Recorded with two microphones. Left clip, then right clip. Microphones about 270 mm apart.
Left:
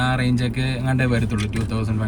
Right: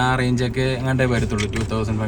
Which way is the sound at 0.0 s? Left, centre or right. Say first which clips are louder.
Right 2 dB; centre.